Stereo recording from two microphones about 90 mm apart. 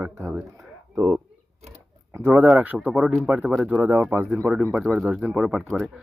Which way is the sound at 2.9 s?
5° right (ahead or behind).